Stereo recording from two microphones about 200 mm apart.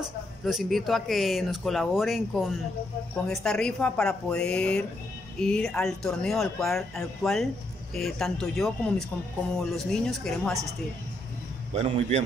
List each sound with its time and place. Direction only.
0.0 s speech: centre (ahead or behind)
11.7 s a man's voice: 30° right (ahead or behind)